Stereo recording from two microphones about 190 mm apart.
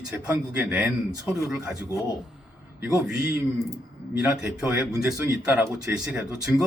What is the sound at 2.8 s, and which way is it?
A man's voice, 15° right (ahead or behind).